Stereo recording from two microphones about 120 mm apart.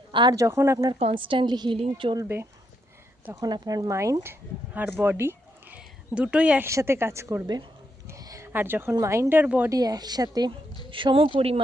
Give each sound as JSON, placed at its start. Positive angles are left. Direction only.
{"t": 0.1, "sound": "speech", "side_deg": -40}
{"t": 0.3, "sound": "a woman's voice", "side_deg": -25}
{"t": 1.1, "sound": "a woman's voice", "side_deg": -45}
{"t": 2.2, "sound": "a woman's voice", "side_deg": -20}
{"t": 3.4, "sound": "speech", "side_deg": -35}
{"t": 6.7, "sound": "a woman's voice", "side_deg": -25}
{"t": 8.0, "sound": "a sound", "side_deg": -25}
{"t": 8.5, "sound": "speech", "side_deg": -20}
{"t": 9.6, "sound": "a woman's voice", "side_deg": -30}